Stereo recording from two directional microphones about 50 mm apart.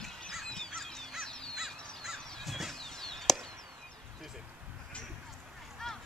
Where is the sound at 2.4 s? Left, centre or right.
Centre.